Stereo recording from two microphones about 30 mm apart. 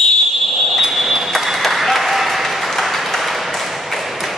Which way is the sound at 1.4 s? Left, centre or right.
Centre.